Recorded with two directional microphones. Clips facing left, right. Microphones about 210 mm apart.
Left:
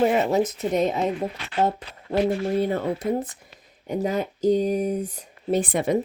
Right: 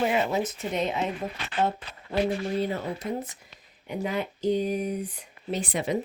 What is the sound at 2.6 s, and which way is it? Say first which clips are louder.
Speech: left 5 dB; 55° left (ahead or behind).